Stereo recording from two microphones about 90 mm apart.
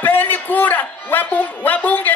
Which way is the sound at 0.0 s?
20° left (ahead or behind).